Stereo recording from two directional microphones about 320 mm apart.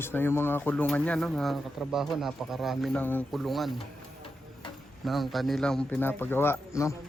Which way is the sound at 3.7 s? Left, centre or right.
Centre.